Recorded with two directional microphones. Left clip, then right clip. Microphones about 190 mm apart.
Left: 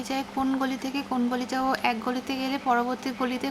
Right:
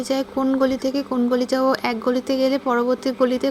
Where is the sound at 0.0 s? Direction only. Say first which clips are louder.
Right 7 dB; 20° right (ahead or behind).